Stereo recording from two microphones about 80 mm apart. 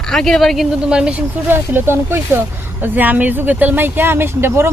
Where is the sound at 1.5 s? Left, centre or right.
Right.